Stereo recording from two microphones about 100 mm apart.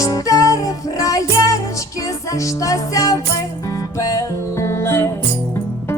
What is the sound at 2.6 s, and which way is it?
Music, 35° left (ahead or behind).